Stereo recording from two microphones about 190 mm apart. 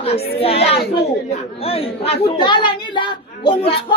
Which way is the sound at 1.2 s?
30° left (ahead or behind).